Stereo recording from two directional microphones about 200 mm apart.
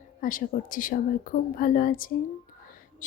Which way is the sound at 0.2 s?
45° left (ahead or behind).